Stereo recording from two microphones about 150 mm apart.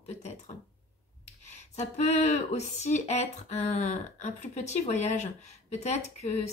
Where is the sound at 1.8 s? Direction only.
50° left (ahead or behind).